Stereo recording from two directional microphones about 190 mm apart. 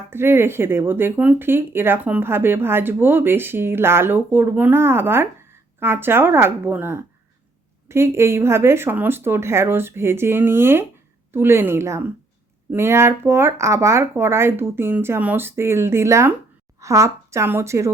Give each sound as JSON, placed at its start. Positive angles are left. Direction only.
{"t": 0.1, "sound": "speech", "side_deg": -10}